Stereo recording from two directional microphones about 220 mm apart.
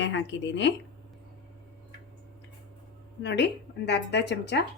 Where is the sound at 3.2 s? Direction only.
50° left (ahead or behind).